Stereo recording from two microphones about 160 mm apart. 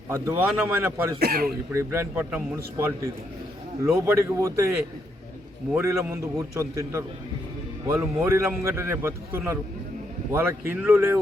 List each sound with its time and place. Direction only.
0.1 s a man's voice: 15° right (ahead or behind)
1.2 s speech: 75° right (ahead or behind)
1.7 s a man's voice: 15° right (ahead or behind)
5.7 s a man's voice: 15° right (ahead or behind)